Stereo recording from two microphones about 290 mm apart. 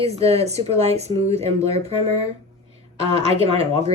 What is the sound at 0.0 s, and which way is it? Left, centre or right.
Speech, right.